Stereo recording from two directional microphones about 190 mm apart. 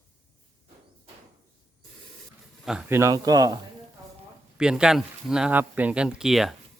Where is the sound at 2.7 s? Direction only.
10° right (ahead or behind).